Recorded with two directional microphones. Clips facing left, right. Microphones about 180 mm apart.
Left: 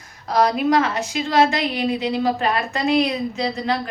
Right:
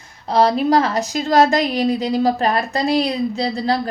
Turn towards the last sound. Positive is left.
turn(degrees=-35)  # may be behind; listen again after turning